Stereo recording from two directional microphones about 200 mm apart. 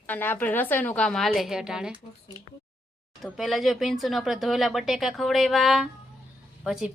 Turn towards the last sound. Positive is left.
turn(degrees=0)  # may be behind; listen again after turning